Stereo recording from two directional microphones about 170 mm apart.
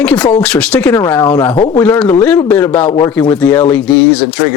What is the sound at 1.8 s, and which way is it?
Speech, 10° left (ahead or behind).